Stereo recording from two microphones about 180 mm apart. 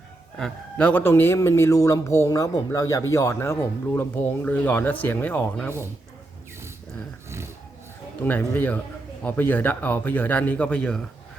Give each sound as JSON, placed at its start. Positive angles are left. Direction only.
{"t": 0.3, "sound": "a man's voice", "side_deg": 5}
{"t": 7.3, "sound": "a sound", "side_deg": -15}
{"t": 8.2, "sound": "a man's voice", "side_deg": 10}